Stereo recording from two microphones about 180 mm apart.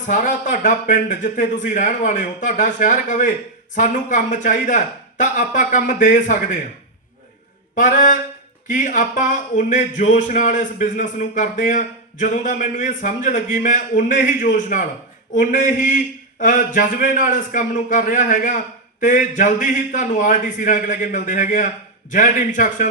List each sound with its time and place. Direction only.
0.1 s a man's voice: 45° left (ahead or behind)
7.8 s a man's voice: 45° left (ahead or behind)